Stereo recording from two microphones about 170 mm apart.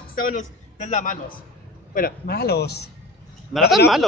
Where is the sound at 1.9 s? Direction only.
65° left (ahead or behind).